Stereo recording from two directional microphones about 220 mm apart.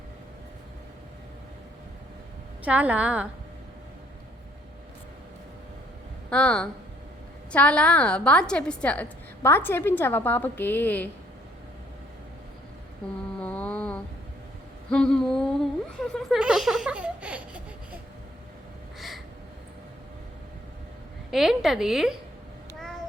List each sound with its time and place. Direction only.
2.6 s a woman's voice: 5° right (ahead or behind)
6.3 s a woman's voice: 5° left (ahead or behind)
13.4 s a sound: 5° left (ahead or behind)
16.0 s baby laughter: centre (ahead or behind)
18.9 s a sound: centre (ahead or behind)
21.2 s a woman's voice: centre (ahead or behind)